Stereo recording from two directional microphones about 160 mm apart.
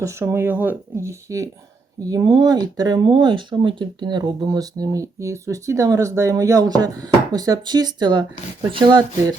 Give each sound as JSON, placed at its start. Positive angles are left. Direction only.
{"t": 0.0, "sound": "speech", "side_deg": -20}